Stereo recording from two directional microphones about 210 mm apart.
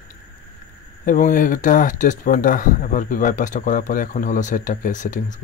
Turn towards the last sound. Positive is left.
turn(degrees=35)  # may be behind; listen again after turning